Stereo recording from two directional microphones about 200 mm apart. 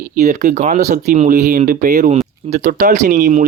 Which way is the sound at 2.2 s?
35° right (ahead or behind).